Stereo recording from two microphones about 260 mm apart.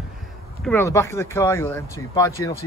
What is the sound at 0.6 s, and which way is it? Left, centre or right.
Speech, centre.